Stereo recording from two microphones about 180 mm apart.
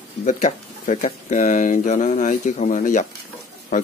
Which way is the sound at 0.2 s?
45° left (ahead or behind).